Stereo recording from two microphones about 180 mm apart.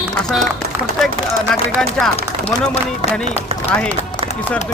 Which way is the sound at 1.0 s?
Centre (ahead or behind).